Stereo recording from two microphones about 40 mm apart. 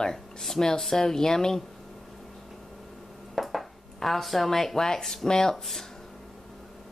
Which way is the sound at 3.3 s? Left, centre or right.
Centre.